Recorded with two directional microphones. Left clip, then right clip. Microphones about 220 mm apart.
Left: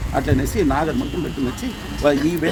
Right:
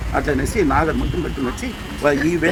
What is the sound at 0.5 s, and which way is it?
Speech, 15° left (ahead or behind).